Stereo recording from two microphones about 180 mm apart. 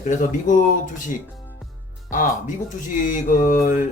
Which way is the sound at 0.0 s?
45° left (ahead or behind).